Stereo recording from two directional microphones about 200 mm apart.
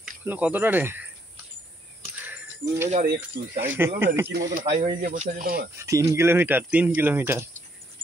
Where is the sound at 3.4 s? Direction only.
50° right (ahead or behind).